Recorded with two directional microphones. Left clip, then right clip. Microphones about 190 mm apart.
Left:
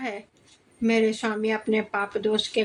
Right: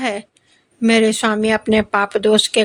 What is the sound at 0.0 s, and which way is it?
A woman's voice, 45° right (ahead or behind).